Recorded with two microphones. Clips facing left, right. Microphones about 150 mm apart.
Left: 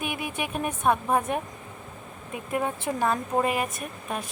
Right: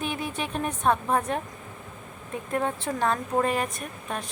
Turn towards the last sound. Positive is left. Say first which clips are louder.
# left 1 dB
turn(degrees=5)  # may be behind; listen again after turning